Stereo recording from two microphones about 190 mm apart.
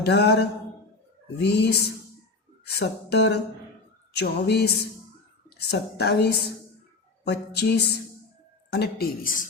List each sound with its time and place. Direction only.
0.1 s a woman's voice: 60° left (ahead or behind)
2.7 s a woman's voice: 60° left (ahead or behind); by 9.5 s 45° left (ahead or behind)